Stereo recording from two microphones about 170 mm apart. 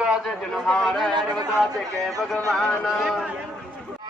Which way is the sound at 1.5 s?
Centre (ahead or behind).